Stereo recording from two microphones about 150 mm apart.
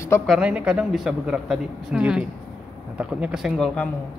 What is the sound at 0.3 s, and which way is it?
Speech, 5° right (ahead or behind).